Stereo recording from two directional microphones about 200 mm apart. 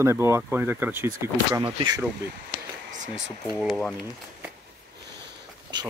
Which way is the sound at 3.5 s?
5° left (ahead or behind).